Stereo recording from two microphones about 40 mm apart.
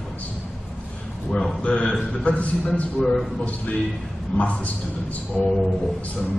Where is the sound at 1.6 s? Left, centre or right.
Left.